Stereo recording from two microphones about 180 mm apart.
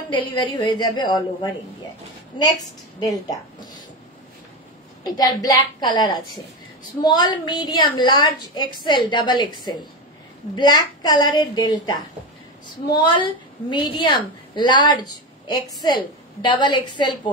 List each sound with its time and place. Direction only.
0.1 s a woman's voice: 25° left (ahead or behind)
3.0 s a woman's voice: 20° left (ahead or behind)
5.0 s a woman's voice: 20° left (ahead or behind)
13.0 s a woman's voice: 25° left (ahead or behind)